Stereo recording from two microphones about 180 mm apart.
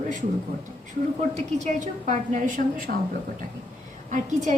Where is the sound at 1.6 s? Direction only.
45° right (ahead or behind).